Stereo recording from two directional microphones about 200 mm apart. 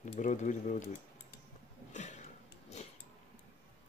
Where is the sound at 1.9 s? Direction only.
35° left (ahead or behind).